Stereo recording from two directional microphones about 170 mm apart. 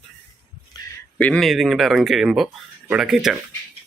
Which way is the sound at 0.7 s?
25° left (ahead or behind).